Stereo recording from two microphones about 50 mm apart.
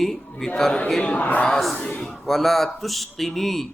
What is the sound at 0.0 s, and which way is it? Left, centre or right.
Speech, centre.